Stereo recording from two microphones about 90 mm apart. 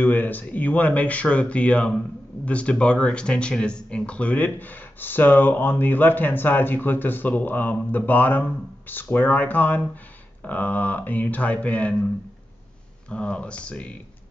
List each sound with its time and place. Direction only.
0.0 s speech: 20° left (ahead or behind)
13.1 s speech: 15° left (ahead or behind)